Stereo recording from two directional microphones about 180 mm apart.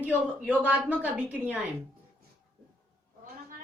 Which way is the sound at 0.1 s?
10° left (ahead or behind).